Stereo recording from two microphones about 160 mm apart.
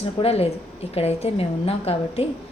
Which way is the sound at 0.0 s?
40° left (ahead or behind).